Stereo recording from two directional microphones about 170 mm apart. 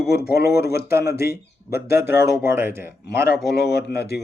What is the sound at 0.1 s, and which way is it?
Speech, 70° left (ahead or behind).